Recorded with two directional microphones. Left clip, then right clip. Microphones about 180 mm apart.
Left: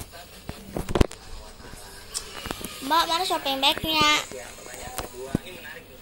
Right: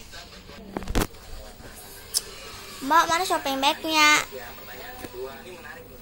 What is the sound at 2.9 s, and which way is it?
A child's voice, 10° right (ahead or behind).